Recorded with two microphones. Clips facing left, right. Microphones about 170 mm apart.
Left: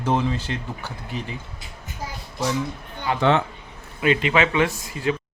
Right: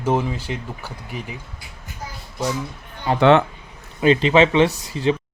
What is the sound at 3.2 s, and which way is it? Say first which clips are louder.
Speech: right 6 dB; 75° right (ahead or behind).